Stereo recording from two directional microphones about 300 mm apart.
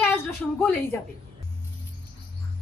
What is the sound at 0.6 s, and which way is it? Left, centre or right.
Speech, centre.